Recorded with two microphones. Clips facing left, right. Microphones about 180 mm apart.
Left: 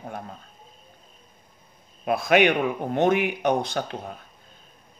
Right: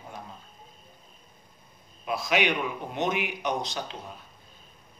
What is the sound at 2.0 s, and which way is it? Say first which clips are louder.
A man's voice: left 7 dB; 55° left (ahead or behind).